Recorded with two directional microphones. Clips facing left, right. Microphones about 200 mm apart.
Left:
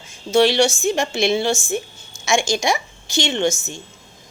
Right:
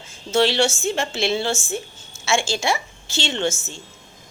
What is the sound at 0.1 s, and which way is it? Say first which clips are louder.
A woman's voice: left 4 dB; 15° left (ahead or behind).